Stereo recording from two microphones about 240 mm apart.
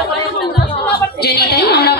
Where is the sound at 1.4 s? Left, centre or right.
Left.